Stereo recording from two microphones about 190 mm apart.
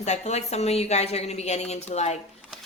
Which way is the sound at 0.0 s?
35° left (ahead or behind).